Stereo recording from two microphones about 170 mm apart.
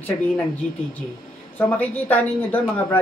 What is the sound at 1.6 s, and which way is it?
Speech, 10° left (ahead or behind).